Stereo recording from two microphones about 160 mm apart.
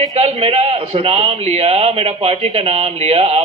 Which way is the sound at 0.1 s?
40° right (ahead or behind).